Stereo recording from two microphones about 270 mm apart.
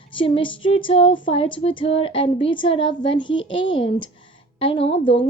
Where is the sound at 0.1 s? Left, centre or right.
Centre.